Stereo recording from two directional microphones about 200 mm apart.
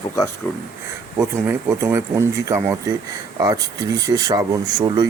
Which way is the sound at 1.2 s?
10° right (ahead or behind).